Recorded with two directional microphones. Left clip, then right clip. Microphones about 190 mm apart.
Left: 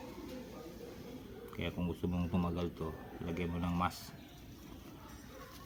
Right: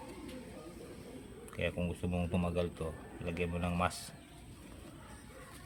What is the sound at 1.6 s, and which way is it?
Speech, 40° right (ahead or behind).